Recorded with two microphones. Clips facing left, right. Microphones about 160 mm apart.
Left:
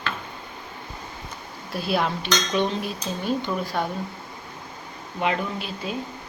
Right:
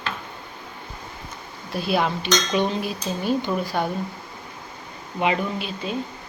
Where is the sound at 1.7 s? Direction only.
Centre (ahead or behind).